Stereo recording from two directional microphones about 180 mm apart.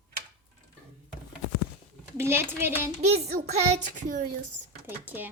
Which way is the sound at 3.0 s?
35° right (ahead or behind).